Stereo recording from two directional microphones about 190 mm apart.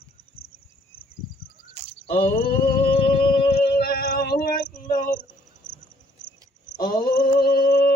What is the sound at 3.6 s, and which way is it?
Music, 55° left (ahead or behind).